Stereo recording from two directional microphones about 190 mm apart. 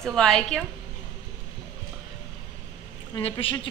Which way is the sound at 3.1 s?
30° left (ahead or behind).